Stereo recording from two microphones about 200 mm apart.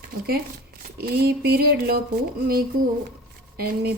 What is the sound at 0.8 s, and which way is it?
Speech, 50° right (ahead or behind).